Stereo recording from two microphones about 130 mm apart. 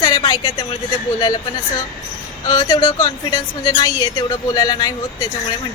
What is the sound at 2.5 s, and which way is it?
A woman's voice, 30° left (ahead or behind).